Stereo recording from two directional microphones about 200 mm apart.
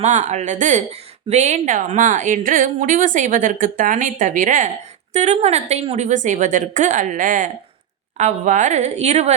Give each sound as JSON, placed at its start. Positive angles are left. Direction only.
{"t": 0.0, "sound": "speech", "side_deg": -35}